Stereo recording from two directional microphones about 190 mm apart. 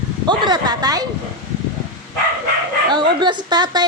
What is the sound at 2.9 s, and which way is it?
Speech, 25° right (ahead or behind).